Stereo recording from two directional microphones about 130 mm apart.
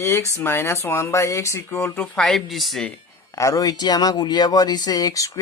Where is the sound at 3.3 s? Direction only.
25° left (ahead or behind).